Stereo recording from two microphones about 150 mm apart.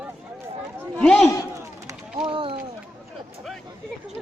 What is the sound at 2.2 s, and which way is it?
Speech, 35° right (ahead or behind).